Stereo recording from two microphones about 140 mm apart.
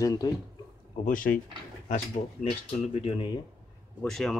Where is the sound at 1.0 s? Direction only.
85° left.